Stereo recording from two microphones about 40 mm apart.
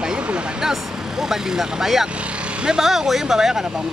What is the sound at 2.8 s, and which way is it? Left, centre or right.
Speech, centre.